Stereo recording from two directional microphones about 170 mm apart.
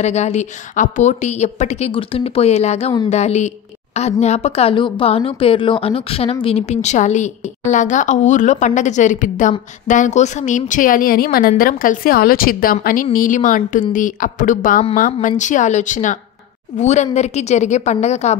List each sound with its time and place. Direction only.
0.0 s a woman's voice: 40° left (ahead or behind)